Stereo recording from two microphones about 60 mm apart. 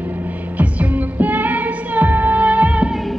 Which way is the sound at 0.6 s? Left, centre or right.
Right.